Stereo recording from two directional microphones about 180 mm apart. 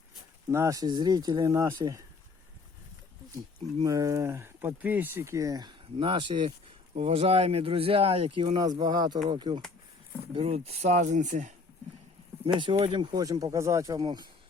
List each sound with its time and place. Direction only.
0.5 s speech: 15° right (ahead or behind)
3.8 s speech: 20° right (ahead or behind); by 11.5 s 40° right (ahead or behind)
12.5 s speech: 30° right (ahead or behind)